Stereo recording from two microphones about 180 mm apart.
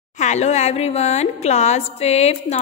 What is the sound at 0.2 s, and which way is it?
A woman's voice, 40° left (ahead or behind).